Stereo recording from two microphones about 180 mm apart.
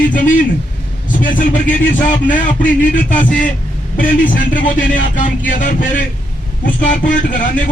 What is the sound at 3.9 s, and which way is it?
Speech, 50° left (ahead or behind).